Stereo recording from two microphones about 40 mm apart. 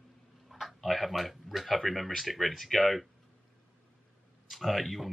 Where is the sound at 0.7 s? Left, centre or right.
Centre.